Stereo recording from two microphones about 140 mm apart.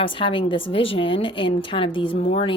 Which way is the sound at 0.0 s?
35° left (ahead or behind).